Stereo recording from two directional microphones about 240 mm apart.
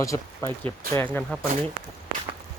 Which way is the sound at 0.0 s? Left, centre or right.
Centre.